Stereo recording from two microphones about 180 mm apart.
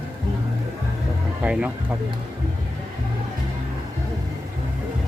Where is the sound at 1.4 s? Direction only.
5° right (ahead or behind).